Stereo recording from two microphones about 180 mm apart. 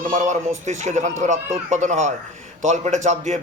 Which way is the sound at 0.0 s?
45° right (ahead or behind).